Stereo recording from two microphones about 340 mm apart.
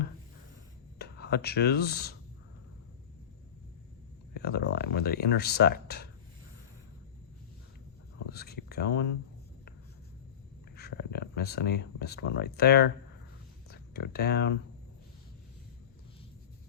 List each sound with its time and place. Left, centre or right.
0.9 s speech: left
4.4 s speech: left
8.3 s a sound: left
10.8 s speech: left